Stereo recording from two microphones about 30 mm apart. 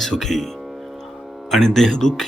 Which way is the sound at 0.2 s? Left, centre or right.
Centre.